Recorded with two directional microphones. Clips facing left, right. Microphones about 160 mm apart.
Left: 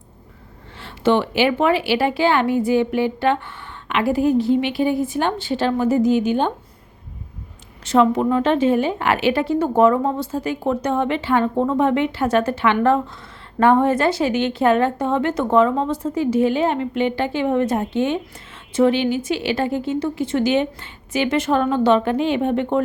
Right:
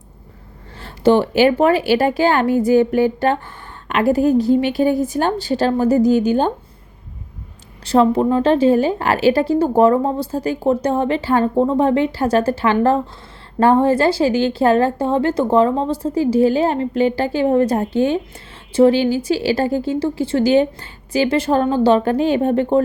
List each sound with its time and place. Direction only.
0.8 s speech: 40° right (ahead or behind)
7.9 s speech: 35° right (ahead or behind)